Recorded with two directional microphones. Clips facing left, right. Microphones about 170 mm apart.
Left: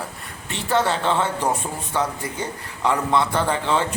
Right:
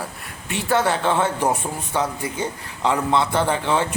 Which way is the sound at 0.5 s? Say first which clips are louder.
Right 1 dB; 10° right (ahead or behind).